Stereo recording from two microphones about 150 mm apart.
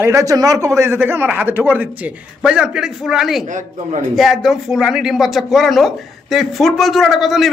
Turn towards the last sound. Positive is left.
turn(degrees=0)  # may be behind; listen again after turning